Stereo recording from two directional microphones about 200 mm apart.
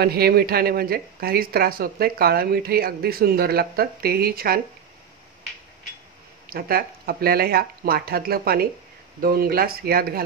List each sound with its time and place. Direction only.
0.0 s speech: 50° right (ahead or behind)
6.5 s speech: 50° right (ahead or behind)